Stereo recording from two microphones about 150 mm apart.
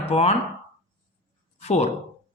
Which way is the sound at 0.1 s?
45° left (ahead or behind).